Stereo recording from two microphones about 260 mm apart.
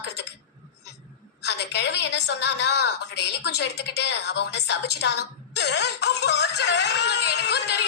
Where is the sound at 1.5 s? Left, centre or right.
Left.